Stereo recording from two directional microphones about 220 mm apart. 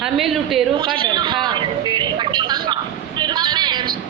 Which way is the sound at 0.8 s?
20° right (ahead or behind).